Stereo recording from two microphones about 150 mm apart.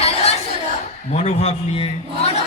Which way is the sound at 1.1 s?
45° left (ahead or behind).